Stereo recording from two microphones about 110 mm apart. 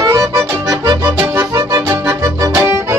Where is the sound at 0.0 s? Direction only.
30° right (ahead or behind).